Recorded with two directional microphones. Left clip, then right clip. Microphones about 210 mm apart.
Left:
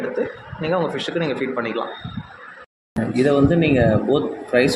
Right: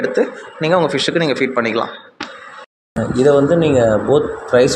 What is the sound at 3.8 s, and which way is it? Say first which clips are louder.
Speech: right 5 dB; 15° right (ahead or behind).